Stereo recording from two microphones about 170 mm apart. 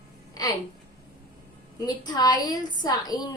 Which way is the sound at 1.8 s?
25° left (ahead or behind).